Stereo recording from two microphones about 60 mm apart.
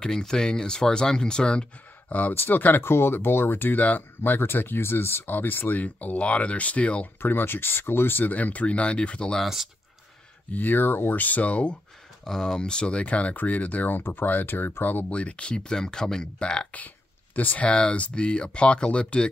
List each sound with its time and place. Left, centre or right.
0.0 s speech: centre
2.1 s speech: left
7.2 s speech: left; by 9.4 s centre
9.4 s speech: centre
10.5 s speech: left
12.3 s speech: centre; by 15.1 s left
15.1 s speech: centre
17.4 s speech: left
17.6 s speech: centre